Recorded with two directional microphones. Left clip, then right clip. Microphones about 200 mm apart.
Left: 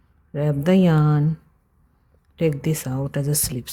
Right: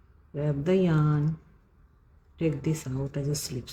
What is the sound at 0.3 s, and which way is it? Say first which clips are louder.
Speech: left 6 dB; 55° left (ahead or behind).